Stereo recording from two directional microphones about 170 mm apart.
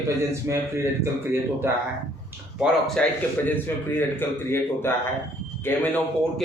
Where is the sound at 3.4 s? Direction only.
10° left (ahead or behind).